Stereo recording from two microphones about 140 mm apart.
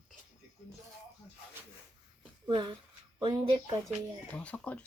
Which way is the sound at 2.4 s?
35° right (ahead or behind).